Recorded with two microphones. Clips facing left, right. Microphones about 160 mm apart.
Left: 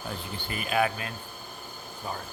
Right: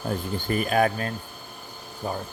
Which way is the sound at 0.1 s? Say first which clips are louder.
Right 12 dB; 45° right (ahead or behind).